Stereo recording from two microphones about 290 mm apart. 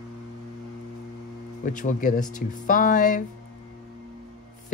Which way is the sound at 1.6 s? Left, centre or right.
Left.